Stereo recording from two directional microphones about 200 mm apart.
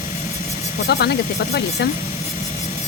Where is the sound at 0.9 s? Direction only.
55° left (ahead or behind).